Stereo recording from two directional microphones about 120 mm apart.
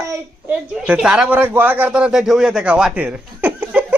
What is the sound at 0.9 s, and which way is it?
A man's voice, 5° right (ahead or behind).